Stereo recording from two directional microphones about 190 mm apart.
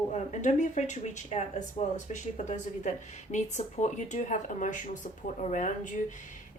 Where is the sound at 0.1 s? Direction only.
40° left (ahead or behind).